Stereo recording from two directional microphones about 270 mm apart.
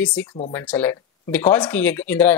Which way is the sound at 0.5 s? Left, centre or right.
Centre.